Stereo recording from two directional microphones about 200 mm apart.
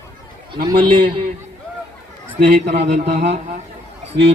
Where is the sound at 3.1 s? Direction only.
55° right (ahead or behind).